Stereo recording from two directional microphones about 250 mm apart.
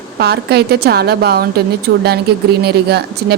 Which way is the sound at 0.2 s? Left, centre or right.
Right.